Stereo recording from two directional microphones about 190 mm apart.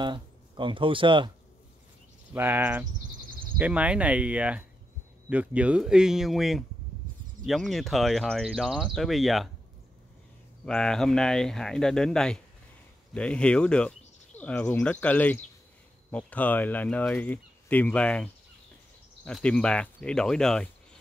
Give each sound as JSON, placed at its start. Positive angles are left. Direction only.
{"t": 0.0, "sound": "speech", "side_deg": -25}
{"t": 2.3, "sound": "speech", "side_deg": -10}
{"t": 10.6, "sound": "speech", "side_deg": 5}